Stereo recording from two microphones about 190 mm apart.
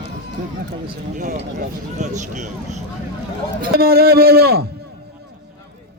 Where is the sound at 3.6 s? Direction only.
50° right (ahead or behind).